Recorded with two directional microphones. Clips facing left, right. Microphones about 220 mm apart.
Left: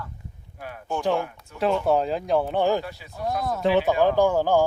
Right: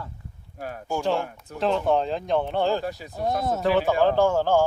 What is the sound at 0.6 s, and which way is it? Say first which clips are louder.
Speech: right 4 dB; 40° right (ahead or behind).